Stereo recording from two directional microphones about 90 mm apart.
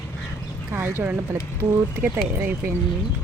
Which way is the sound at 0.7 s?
25° right (ahead or behind).